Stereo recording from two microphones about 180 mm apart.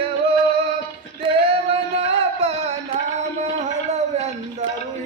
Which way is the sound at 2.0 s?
35° right (ahead or behind).